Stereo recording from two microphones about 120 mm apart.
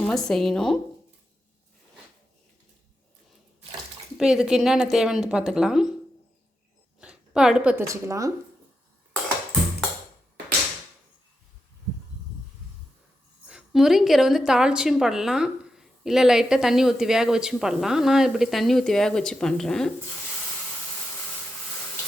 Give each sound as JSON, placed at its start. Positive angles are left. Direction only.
{"t": 0.0, "sound": "a woman's voice", "side_deg": 5}
{"t": 4.2, "sound": "a woman's voice", "side_deg": -5}
{"t": 7.0, "sound": "a sound", "side_deg": -5}
{"t": 7.9, "sound": "speech", "side_deg": -25}
{"t": 13.5, "sound": "a woman's voice", "side_deg": -5}